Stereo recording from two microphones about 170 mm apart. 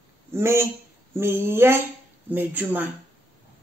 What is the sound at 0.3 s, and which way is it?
Speech, 15° right (ahead or behind).